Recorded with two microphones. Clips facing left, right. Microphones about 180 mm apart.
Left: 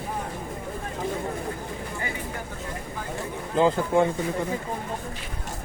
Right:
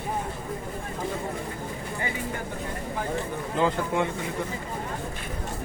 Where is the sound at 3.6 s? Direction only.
35° left (ahead or behind).